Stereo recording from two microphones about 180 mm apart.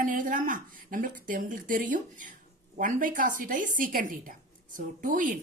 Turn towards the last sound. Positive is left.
turn(degrees=-45)  # may be behind; listen again after turning